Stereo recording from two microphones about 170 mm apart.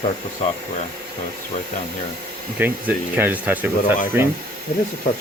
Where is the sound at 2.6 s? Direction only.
10° right (ahead or behind).